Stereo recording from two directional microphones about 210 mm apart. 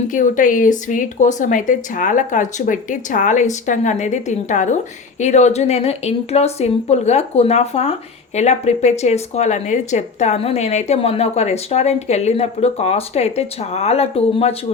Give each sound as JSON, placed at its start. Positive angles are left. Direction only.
{"t": 0.1, "sound": "speech", "side_deg": 40}